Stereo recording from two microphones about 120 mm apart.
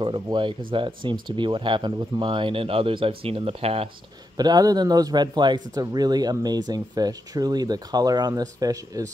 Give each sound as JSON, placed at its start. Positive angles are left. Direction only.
{"t": 0.0, "sound": "speech", "side_deg": -45}
{"t": 4.4, "sound": "speech", "side_deg": -35}